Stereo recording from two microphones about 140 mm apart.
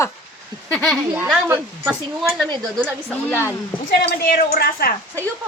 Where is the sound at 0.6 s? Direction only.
Centre (ahead or behind).